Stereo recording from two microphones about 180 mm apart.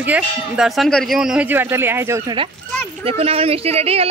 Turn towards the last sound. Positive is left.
turn(degrees=-35)  # may be behind; listen again after turning